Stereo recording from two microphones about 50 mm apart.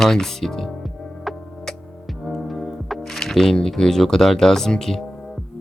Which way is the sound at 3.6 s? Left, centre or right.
Centre.